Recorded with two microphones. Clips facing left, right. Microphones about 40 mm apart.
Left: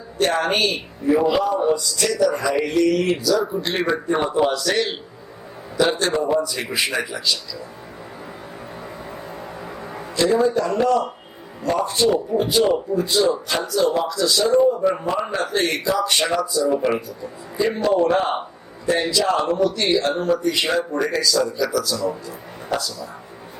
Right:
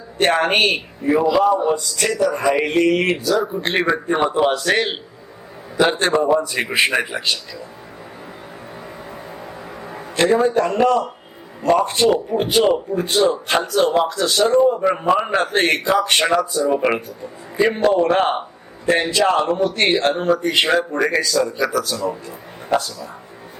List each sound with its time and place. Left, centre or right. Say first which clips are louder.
0.2 s a man's voice: right 3 dB; right
6.0 s a man's voice: right 3 dB; right
6.5 s a man's voice: right 5 dB; right
9.4 s music: even; centre
10.2 s a man's voice: right 2 dB; right